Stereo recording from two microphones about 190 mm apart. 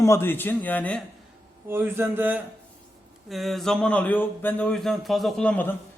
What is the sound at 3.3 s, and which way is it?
A man's voice, centre (ahead or behind).